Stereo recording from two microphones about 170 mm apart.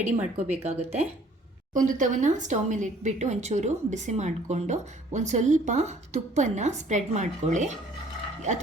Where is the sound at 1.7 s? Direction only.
50° right (ahead or behind).